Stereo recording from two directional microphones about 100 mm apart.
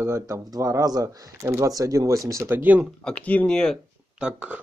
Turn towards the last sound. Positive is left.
turn(degrees=-15)  # may be behind; listen again after turning